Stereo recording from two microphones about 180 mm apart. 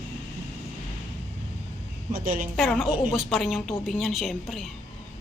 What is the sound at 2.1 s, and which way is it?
Speech, 50° right (ahead or behind).